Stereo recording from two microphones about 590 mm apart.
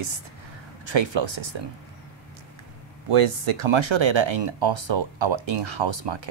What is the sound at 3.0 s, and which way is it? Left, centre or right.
Speech, right.